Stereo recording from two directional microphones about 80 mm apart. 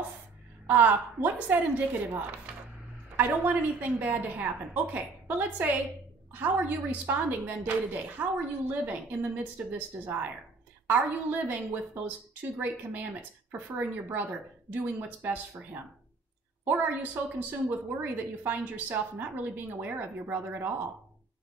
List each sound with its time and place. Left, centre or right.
0.7 s a woman's voice: right